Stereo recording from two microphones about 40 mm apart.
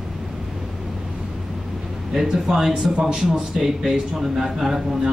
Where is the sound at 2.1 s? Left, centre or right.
Centre.